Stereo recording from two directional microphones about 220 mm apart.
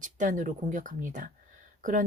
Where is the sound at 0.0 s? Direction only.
35° right (ahead or behind).